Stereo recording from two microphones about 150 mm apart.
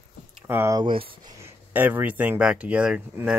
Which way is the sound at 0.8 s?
35° right (ahead or behind).